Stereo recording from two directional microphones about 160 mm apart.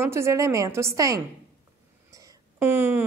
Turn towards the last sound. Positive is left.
turn(degrees=-15)  # may be behind; listen again after turning